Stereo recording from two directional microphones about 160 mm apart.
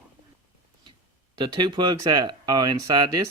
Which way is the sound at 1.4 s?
30° right (ahead or behind).